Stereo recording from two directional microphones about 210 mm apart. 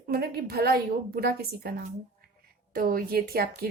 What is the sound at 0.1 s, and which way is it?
Speech, 50° right (ahead or behind).